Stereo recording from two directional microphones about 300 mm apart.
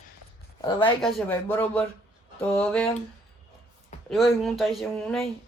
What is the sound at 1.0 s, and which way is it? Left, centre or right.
Speech, centre.